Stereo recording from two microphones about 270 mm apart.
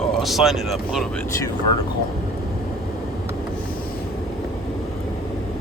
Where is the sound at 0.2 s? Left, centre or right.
Centre.